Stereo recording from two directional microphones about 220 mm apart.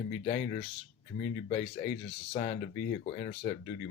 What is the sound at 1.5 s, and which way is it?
Speech, 25° left (ahead or behind).